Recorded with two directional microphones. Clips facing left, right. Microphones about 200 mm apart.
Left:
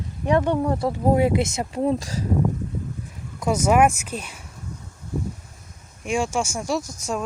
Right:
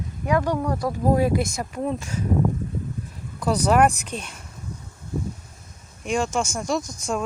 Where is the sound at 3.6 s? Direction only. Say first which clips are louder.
Left 1 dB; 5° left (ahead or behind).